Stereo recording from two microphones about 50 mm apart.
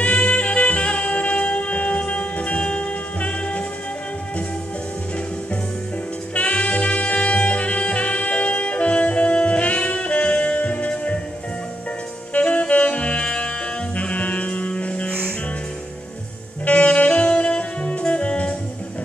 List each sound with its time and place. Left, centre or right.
0.0 s music: left
6.3 s saxophone: left
12.4 s saxophone: left
13.9 s music: left
16.6 s saxophone: left